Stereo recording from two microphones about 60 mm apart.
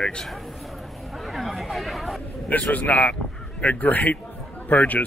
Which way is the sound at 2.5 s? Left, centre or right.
Left.